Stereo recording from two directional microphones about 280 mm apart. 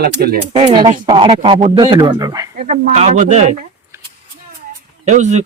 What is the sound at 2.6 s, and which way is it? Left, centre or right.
Speech, right.